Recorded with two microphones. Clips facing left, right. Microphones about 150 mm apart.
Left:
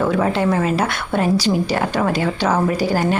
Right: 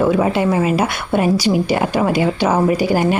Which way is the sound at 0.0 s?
10° right (ahead or behind).